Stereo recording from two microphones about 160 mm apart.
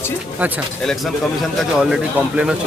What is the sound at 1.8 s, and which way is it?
Speech, 5° right (ahead or behind).